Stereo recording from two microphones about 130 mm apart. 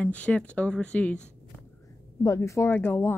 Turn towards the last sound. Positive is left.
turn(degrees=15)  # may be behind; listen again after turning